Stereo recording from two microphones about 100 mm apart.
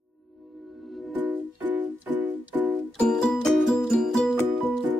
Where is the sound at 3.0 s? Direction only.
5° left (ahead or behind).